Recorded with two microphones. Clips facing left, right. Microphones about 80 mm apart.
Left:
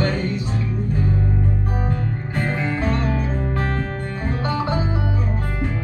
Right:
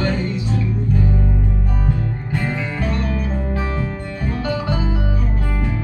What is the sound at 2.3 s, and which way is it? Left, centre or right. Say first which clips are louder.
Music: left 1 dB; left.